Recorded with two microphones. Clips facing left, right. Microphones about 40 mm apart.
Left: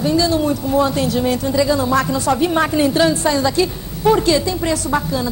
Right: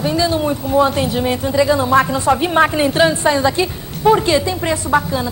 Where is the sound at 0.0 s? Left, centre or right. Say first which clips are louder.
Left 1 dB; right.